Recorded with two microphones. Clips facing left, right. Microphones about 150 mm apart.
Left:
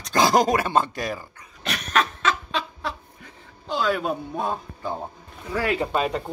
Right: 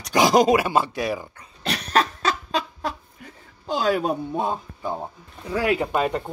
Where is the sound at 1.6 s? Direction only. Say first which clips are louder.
Right 2 dB; 30° right (ahead or behind).